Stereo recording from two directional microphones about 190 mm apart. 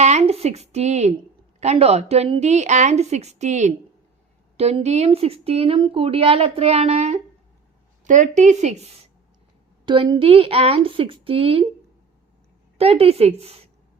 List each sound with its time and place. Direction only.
0.0 s speech: 35° right (ahead or behind)
9.8 s a woman's voice: 25° right (ahead or behind)
12.7 s speech: 30° right (ahead or behind)